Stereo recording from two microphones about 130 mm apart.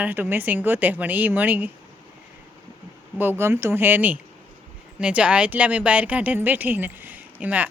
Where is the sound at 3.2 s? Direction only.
15° right (ahead or behind).